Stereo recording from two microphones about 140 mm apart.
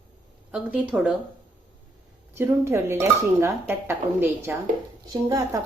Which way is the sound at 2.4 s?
15° right (ahead or behind).